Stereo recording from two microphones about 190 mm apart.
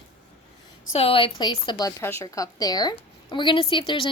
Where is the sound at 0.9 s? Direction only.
30° left (ahead or behind).